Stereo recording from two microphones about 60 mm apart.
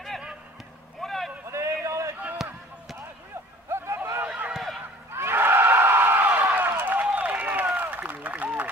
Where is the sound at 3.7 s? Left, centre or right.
Right.